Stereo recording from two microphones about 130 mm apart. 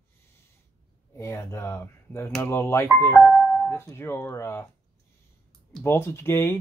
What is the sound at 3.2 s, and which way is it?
Music, 5° left (ahead or behind).